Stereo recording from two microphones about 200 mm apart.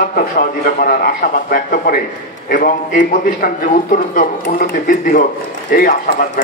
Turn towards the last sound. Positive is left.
turn(degrees=45)  # may be behind; listen again after turning